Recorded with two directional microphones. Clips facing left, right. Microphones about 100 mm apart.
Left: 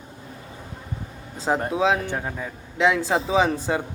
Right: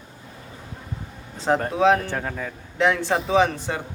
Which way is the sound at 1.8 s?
10° left (ahead or behind).